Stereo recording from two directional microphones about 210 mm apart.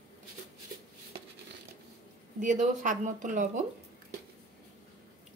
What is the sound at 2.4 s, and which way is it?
Speech, 35° right (ahead or behind).